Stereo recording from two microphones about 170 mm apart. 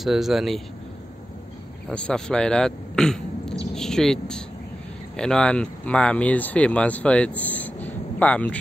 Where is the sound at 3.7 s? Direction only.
5° left (ahead or behind).